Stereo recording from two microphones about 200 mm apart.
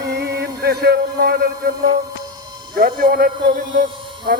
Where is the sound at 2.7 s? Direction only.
45° right (ahead or behind).